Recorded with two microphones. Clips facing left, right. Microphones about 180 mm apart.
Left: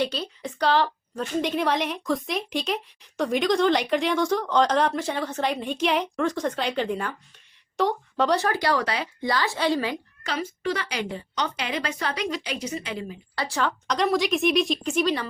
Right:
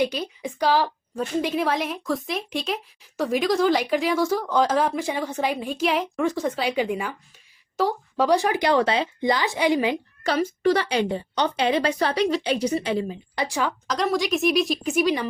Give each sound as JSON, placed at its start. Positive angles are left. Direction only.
{"t": 0.0, "sound": "a woman's voice", "side_deg": -10}
{"t": 10.2, "sound": "a woman's voice", "side_deg": -40}
{"t": 13.3, "sound": "a woman's voice", "side_deg": -15}